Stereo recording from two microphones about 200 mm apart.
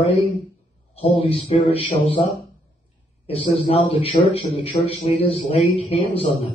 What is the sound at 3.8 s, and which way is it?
Speech, 30° left (ahead or behind).